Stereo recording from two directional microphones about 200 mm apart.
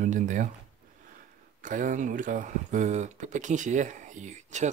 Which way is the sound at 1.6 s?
40° right (ahead or behind).